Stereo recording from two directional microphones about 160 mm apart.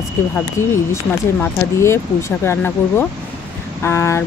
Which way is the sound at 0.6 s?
15° left (ahead or behind).